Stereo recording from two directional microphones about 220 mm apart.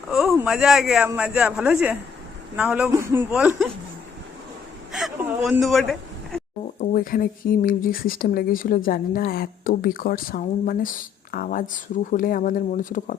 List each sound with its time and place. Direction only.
0.1 s a sound: centre (ahead or behind)
0.3 s a man's voice: centre (ahead or behind)
4.9 s speech: centre (ahead or behind)
6.7 s speech: 40° left (ahead or behind)